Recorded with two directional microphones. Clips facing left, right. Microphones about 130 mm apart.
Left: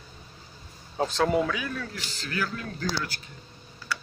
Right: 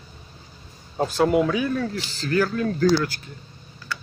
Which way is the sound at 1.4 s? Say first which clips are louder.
Right 8 dB; 30° right (ahead or behind).